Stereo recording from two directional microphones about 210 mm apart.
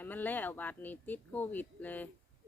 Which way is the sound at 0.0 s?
10° left (ahead or behind).